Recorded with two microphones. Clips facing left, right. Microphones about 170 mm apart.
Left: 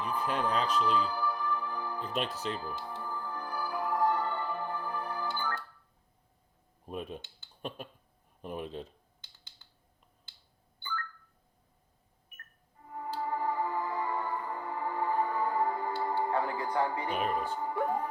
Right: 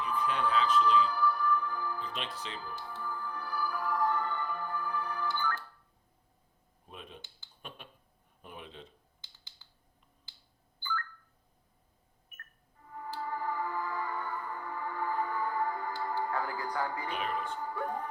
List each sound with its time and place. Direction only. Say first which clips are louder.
0.0 s music: even; 40° left (ahead or behind)
2.0 s speech: left 5 dB; 45° left (ahead or behind)
3.0 s music: left 1 dB; 30° left (ahead or behind)
6.8 s speech: left 10 dB; 45° left (ahead or behind)
8.4 s speech: left 9 dB; 40° left (ahead or behind)
12.8 s music: left 3 dB; 30° left (ahead or behind)
17.1 s speech: left 4 dB; 40° left (ahead or behind)
17.6 s music: left 4 dB; 25° left (ahead or behind)